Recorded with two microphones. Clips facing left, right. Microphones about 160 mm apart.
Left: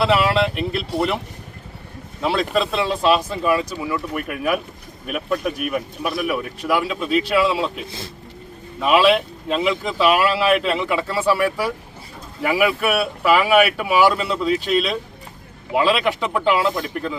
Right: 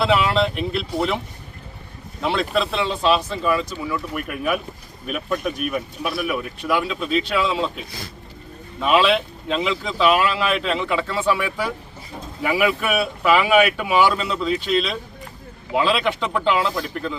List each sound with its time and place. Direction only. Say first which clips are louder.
0.0 s a sound: left 1 dB; 5° left (ahead or behind)
0.9 s speech: left 1 dB; 5° left (ahead or behind)
2.2 s speech: left 1 dB; centre (ahead or behind)
7.9 s speech: left 2 dB; 25° left (ahead or behind)
8.8 s speech: left 2 dB; 5° left (ahead or behind)
12.5 s speech: left 2 dB; 5° left (ahead or behind)